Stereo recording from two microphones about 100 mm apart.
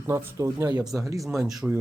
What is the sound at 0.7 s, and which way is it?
Speech, 40° right (ahead or behind).